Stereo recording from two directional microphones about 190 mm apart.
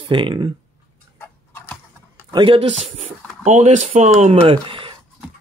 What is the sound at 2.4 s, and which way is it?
Speech, 35° right (ahead or behind).